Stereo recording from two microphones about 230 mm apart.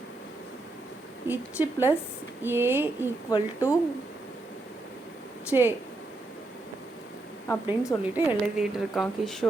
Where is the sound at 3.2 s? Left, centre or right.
Centre.